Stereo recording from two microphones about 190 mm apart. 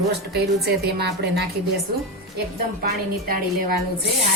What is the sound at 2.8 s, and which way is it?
Speech, 50° right (ahead or behind).